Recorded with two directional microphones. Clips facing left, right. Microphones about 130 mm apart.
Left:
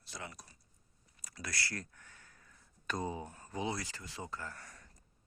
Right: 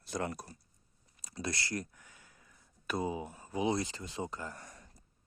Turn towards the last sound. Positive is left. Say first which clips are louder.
# right 2 dB
turn(degrees=-20)  # may be behind; listen again after turning